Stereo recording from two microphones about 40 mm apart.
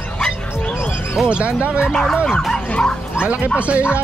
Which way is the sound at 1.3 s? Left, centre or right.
Right.